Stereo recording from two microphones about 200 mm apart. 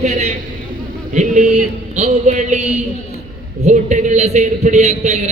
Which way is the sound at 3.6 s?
35° right (ahead or behind).